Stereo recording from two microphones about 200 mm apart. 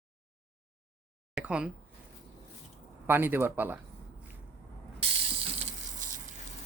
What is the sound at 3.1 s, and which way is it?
Speech, 10° right (ahead or behind).